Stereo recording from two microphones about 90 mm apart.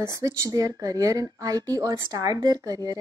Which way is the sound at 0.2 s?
40° right (ahead or behind).